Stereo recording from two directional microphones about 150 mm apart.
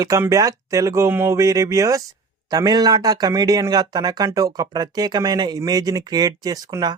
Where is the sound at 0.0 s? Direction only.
20° right (ahead or behind).